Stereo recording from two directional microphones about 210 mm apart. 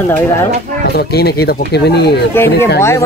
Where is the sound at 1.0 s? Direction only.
50° left (ahead or behind).